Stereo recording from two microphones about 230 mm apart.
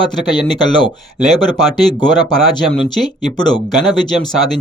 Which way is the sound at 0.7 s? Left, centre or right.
Centre.